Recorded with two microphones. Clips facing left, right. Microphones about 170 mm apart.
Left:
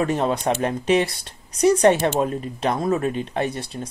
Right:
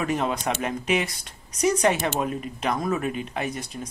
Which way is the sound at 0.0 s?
35° left (ahead or behind).